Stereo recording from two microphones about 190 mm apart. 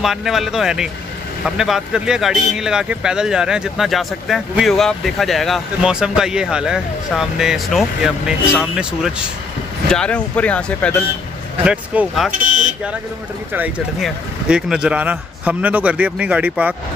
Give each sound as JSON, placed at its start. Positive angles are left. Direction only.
{"t": 0.0, "sound": "speech", "side_deg": 0}
{"t": 11.6, "sound": "speech", "side_deg": -5}
{"t": 12.3, "sound": "car alarm", "side_deg": -40}
{"t": 13.5, "sound": "speech", "side_deg": -10}